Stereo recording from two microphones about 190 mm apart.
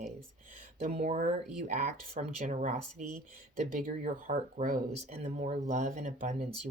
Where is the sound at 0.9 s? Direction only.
35° right (ahead or behind).